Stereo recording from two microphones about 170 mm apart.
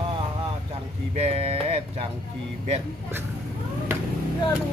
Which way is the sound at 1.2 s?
35° right (ahead or behind).